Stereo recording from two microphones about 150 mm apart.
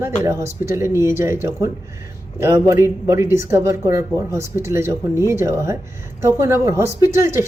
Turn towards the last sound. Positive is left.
turn(degrees=-20)  # may be behind; listen again after turning